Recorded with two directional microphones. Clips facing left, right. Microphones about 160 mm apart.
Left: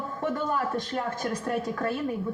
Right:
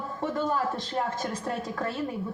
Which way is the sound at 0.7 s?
25° right (ahead or behind).